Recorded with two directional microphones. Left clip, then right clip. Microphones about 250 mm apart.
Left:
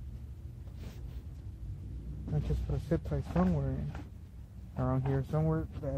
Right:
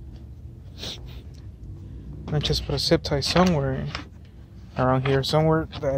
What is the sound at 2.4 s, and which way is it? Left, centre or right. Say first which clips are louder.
Speech: right 17 dB; right.